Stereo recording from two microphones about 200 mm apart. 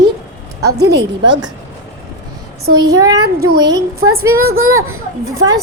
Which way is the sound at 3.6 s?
20° right (ahead or behind).